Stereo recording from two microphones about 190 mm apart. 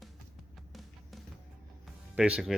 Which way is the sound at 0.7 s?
Centre (ahead or behind).